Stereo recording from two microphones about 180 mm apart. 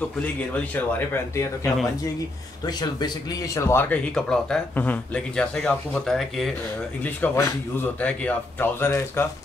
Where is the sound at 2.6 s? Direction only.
20° left (ahead or behind).